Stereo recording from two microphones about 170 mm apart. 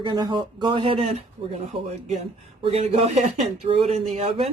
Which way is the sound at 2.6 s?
35° right (ahead or behind).